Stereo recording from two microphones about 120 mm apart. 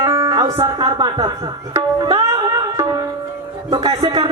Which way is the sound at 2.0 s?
35° right (ahead or behind).